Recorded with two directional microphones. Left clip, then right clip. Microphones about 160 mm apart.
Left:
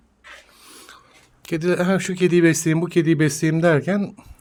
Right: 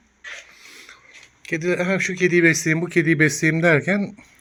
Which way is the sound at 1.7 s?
60° left (ahead or behind).